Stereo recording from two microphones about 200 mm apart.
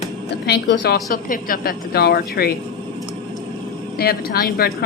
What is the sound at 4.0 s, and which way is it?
Speech, 50° left (ahead or behind).